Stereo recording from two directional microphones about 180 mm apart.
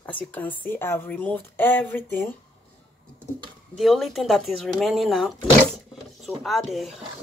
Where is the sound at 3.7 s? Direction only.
Centre (ahead or behind).